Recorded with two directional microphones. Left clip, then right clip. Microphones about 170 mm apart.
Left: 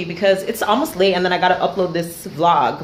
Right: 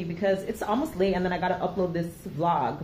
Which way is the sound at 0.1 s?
20° left (ahead or behind).